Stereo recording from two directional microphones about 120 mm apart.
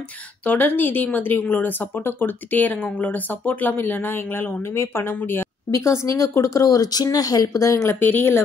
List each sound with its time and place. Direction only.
0.4 s speech: 15° left (ahead or behind)